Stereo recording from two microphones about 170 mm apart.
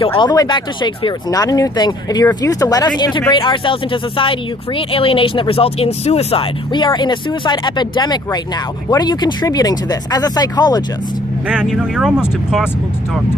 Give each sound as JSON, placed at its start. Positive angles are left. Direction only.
{"t": 0.0, "sound": "speech", "side_deg": 30}
{"t": 11.4, "sound": "speech", "side_deg": -5}